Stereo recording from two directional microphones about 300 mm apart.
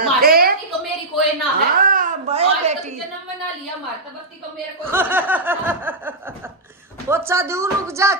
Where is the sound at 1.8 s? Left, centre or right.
Right.